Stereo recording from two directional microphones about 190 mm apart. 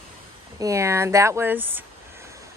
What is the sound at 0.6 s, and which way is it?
Speech, 15° right (ahead or behind).